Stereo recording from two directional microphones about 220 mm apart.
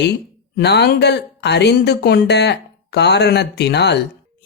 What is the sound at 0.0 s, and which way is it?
Speech, 50° left (ahead or behind).